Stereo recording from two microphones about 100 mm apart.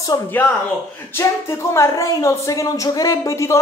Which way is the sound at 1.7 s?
30° left (ahead or behind).